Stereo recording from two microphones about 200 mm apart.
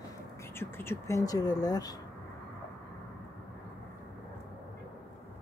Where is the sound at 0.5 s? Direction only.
10° left (ahead or behind).